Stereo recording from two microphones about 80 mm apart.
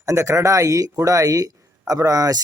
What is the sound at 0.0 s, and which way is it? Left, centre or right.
Speech, right.